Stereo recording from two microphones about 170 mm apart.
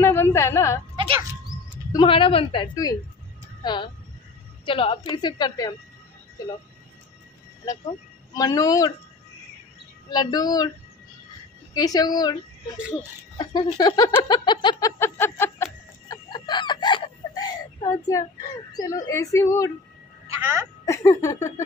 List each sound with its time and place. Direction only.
0.0 s a sound: 15° left (ahead or behind)
1.5 s a sound: 25° right (ahead or behind)
1.9 s a woman's voice: 25° left (ahead or behind)
8.4 s a woman's voice: 20° left (ahead or behind)
10.0 s a woman's voice: 25° left (ahead or behind)
11.7 s a woman's voice: 20° left (ahead or behind)
13.4 s a sound: 25° left (ahead or behind)
18.7 s speech: 20° left (ahead or behind)
20.8 s speech: 20° left (ahead or behind)